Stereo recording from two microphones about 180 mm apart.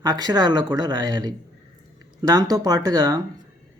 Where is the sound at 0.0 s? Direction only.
20° right (ahead or behind).